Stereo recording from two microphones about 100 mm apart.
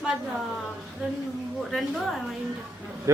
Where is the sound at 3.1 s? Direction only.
30° right (ahead or behind).